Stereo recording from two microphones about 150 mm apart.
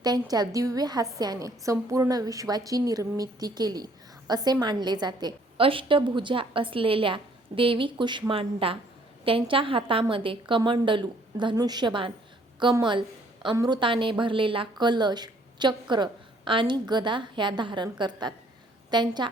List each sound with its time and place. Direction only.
0.0 s a woman's voice: 25° right (ahead or behind)